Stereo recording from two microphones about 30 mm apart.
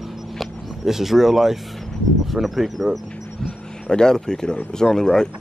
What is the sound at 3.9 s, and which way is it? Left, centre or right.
Speech, left.